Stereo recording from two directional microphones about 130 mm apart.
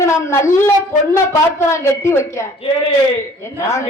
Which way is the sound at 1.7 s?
20° left (ahead or behind).